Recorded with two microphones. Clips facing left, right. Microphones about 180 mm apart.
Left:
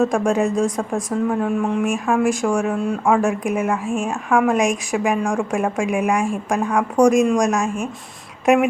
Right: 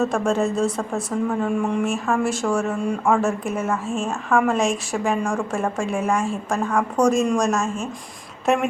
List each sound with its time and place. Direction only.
0.0 s speech: 15° left (ahead or behind)